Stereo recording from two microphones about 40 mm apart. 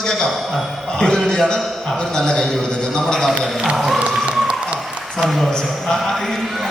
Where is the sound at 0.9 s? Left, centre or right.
Centre.